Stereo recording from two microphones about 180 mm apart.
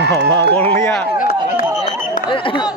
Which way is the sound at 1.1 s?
50° left (ahead or behind).